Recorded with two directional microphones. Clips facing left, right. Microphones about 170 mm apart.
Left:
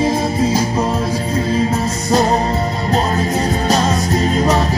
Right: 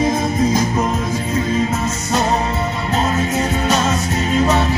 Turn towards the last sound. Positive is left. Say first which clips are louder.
# left 1 dB
turn(degrees=35)  # may be behind; listen again after turning